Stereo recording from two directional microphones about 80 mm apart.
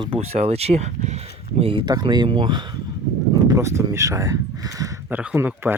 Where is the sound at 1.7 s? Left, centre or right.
Right.